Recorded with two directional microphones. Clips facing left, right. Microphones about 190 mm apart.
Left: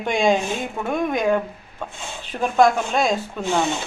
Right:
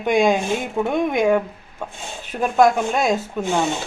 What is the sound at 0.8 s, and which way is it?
Speech, 15° right (ahead or behind).